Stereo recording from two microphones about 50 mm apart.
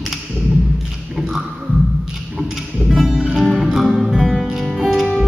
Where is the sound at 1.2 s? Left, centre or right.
Centre.